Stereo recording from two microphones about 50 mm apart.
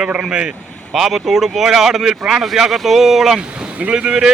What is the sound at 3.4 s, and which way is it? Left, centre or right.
Speech, right.